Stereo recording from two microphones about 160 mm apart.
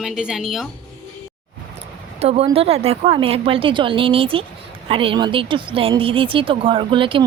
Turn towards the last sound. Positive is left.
turn(degrees=-30)  # may be behind; listen again after turning